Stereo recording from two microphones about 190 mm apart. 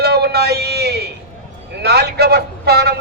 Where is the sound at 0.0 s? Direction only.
60° right (ahead or behind).